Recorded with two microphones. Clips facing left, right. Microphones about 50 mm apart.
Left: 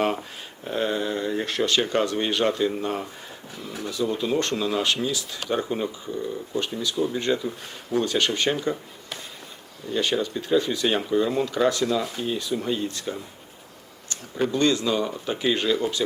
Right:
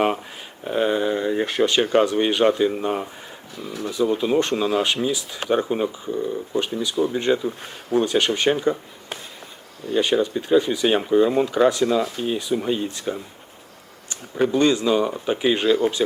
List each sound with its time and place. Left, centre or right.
0.6 s speech: centre
9.9 s speech: centre